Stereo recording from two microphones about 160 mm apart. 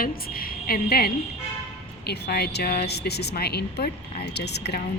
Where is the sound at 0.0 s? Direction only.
65° left (ahead or behind).